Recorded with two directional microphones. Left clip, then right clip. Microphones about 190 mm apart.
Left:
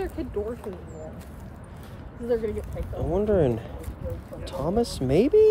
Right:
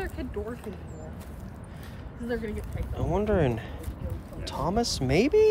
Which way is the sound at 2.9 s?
20° left (ahead or behind).